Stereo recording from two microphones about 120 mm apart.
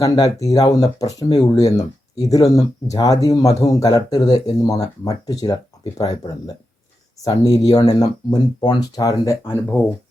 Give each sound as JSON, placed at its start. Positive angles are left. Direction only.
{"t": 0.0, "sound": "speech", "side_deg": 30}